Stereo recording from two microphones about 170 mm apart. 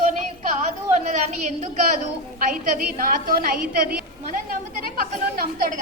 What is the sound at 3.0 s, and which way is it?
Speech, 55° right (ahead or behind).